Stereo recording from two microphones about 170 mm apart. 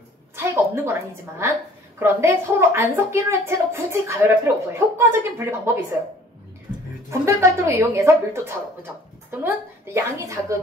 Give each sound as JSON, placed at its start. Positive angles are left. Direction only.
{"t": 0.4, "sound": "a sound", "side_deg": -15}
{"t": 2.0, "sound": "a woman's voice", "side_deg": -15}
{"t": 7.1, "sound": "a woman's voice", "side_deg": -15}